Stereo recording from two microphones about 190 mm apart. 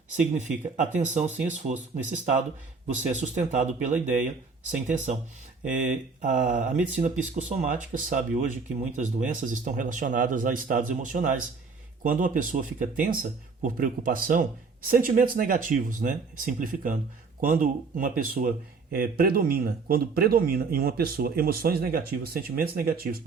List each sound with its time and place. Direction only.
0.3 s speech: 40° right (ahead or behind)
5.6 s a man's voice: 40° right (ahead or behind)